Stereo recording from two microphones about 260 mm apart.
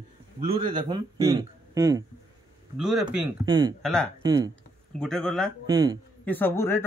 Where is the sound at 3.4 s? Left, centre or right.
Centre.